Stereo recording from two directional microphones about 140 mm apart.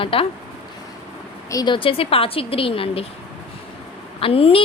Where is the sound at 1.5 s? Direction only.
30° left (ahead or behind).